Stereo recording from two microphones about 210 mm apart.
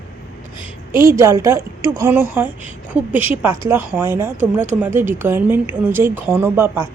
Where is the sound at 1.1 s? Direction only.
15° right (ahead or behind).